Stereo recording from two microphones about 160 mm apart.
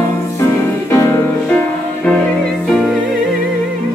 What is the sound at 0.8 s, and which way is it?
Music, 15° left (ahead or behind).